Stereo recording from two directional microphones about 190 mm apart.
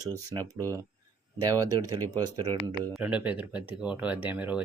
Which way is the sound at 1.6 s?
20° right (ahead or behind).